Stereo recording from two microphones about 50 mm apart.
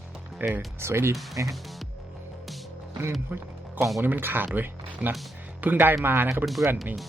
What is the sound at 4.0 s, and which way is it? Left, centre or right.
Speech, right.